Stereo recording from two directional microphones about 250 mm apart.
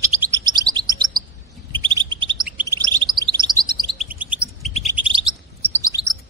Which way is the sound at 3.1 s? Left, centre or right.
Centre.